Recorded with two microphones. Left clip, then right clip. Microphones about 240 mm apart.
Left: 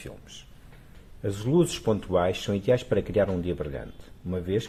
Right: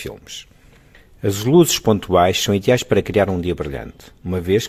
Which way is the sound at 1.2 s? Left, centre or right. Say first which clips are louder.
Right 10 dB; right.